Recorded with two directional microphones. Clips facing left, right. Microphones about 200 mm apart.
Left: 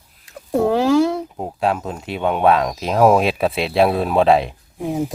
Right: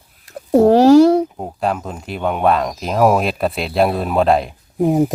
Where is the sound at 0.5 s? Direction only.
40° right (ahead or behind).